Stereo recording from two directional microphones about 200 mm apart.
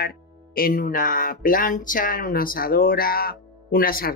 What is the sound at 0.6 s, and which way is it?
Speech, 45° left (ahead or behind).